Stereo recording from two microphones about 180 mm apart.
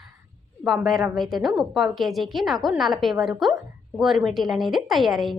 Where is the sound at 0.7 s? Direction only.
Centre (ahead or behind).